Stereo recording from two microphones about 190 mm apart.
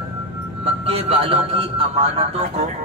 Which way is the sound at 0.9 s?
30° right (ahead or behind).